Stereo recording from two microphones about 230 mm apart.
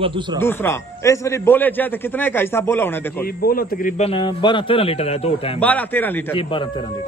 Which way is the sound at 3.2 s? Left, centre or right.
Left.